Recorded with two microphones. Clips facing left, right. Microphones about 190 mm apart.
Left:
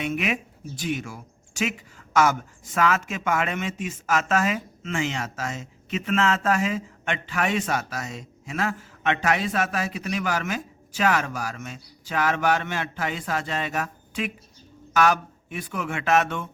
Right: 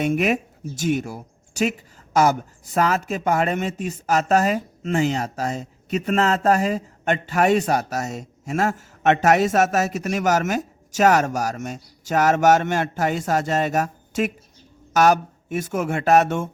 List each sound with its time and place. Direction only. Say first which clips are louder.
0.0 s speech: right 6 dB; 40° right (ahead or behind)